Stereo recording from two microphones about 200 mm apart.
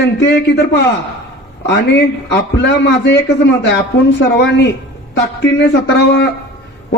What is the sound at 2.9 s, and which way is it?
Speech, 65° left (ahead or behind).